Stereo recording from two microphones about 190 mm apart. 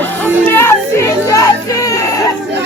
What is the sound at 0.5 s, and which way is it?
Speech, 10° left (ahead or behind).